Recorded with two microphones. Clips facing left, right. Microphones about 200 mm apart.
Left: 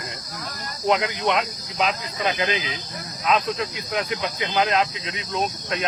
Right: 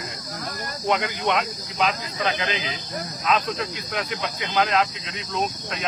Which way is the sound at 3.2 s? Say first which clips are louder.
Left 2 dB; centre (ahead or behind).